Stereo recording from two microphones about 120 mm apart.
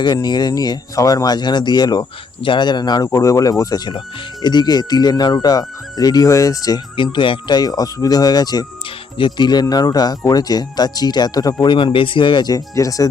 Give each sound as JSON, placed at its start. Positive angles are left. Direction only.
{"t": 0.0, "sound": "speech", "side_deg": 35}
{"t": 6.9, "sound": "speech", "side_deg": 45}
{"t": 11.6, "sound": "speech", "side_deg": 45}